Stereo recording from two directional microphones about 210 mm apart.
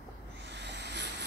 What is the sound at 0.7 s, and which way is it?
Vehicle, 55° right (ahead or behind).